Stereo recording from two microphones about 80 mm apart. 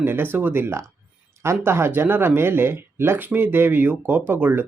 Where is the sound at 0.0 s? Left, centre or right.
Right.